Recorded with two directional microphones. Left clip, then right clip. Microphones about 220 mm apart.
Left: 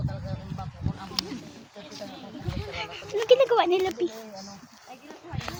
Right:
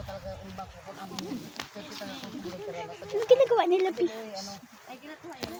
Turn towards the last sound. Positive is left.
turn(degrees=-5)  # may be behind; listen again after turning